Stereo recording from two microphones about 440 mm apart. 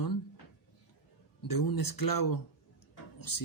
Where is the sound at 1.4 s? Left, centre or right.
Left.